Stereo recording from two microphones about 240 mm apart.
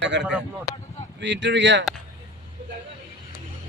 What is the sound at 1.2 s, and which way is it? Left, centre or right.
Speech, right.